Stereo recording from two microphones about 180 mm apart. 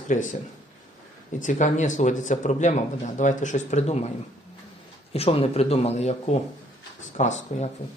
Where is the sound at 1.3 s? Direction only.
45° left (ahead or behind).